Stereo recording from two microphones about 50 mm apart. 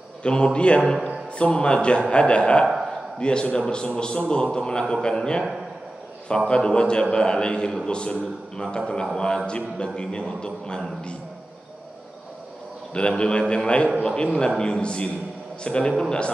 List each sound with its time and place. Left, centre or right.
0.2 s a man's voice: centre
13.1 s a man's voice: centre